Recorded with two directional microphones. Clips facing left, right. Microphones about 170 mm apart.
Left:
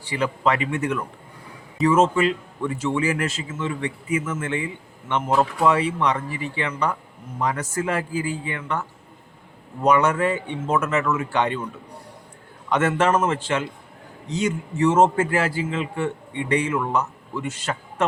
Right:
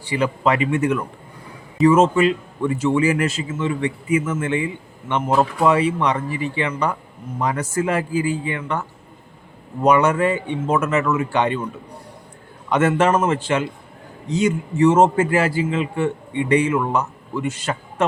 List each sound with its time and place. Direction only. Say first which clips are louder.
0.0 s a man's voice: right 3 dB; 15° right (ahead or behind)
9.8 s a man's voice: right 3 dB; 10° right (ahead or behind)
12.6 s a man's voice: right 3 dB; 10° right (ahead or behind)